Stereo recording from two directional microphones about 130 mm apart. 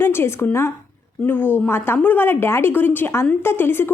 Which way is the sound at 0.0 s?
20° left (ahead or behind).